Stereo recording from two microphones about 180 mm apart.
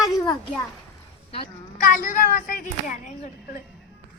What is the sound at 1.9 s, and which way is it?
Speech, 50° left (ahead or behind).